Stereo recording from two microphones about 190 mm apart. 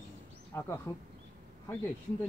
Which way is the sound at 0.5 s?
15° left (ahead or behind).